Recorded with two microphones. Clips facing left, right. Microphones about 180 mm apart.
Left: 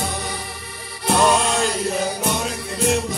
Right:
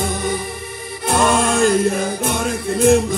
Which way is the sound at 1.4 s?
50° right (ahead or behind).